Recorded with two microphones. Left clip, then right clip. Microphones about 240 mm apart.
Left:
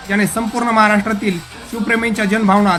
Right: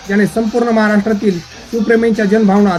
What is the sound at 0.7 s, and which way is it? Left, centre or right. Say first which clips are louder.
A man's voice: even; left.